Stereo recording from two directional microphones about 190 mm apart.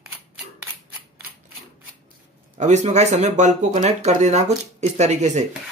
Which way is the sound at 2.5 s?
40° right (ahead or behind).